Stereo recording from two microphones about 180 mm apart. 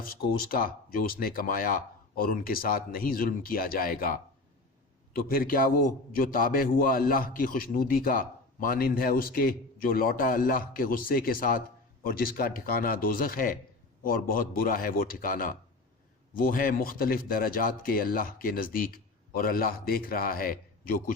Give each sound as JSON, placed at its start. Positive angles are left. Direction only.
{"t": 0.0, "sound": "a man's voice", "side_deg": 55}